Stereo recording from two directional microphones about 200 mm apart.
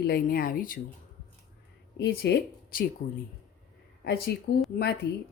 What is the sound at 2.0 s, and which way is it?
Speech, 55° left (ahead or behind).